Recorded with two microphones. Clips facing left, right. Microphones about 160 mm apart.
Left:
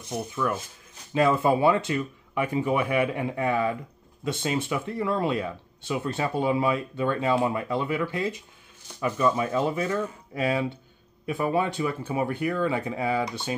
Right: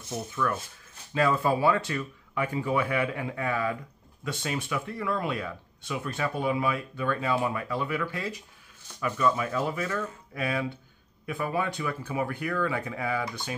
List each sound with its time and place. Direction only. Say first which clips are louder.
0.1 s speech: left 2 dB; 20° left (ahead or behind)